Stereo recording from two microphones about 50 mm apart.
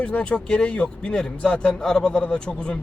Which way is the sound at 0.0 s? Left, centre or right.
Left.